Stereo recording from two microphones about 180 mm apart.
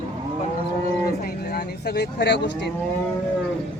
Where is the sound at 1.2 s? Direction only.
60° left (ahead or behind).